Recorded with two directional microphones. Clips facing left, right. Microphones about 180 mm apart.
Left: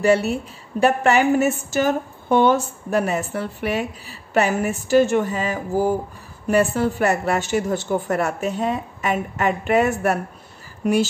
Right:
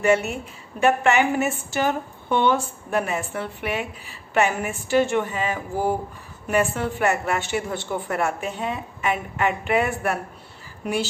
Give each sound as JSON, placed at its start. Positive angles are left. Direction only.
{"t": 0.0, "sound": "a woman's voice", "side_deg": 35}